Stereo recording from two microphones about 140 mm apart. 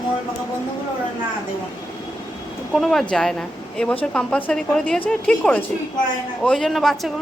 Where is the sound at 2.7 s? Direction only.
Centre (ahead or behind).